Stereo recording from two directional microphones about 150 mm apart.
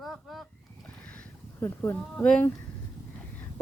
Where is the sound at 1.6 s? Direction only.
15° left (ahead or behind).